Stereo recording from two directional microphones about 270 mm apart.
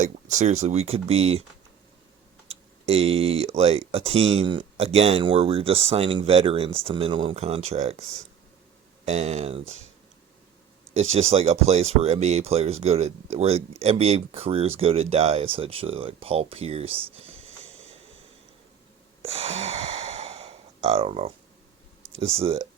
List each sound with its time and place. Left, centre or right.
0.0 s speech: right
2.5 s speech: right
9.0 s speech: right
10.9 s speech: right
19.2 s sigh: right
22.2 s speech: right